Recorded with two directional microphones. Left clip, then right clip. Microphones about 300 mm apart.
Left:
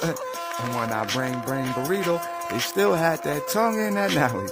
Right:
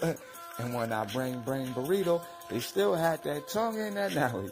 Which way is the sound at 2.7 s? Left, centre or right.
Centre.